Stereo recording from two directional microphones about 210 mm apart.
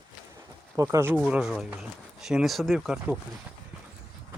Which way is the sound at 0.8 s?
15° right (ahead or behind).